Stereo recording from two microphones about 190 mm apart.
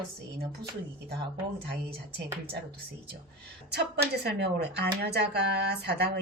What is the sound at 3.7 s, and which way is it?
A woman's voice, 60° right (ahead or behind).